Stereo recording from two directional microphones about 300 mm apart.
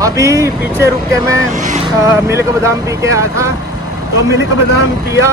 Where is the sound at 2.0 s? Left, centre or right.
Centre.